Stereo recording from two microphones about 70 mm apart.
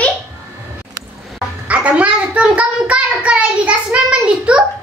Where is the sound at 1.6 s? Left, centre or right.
Centre.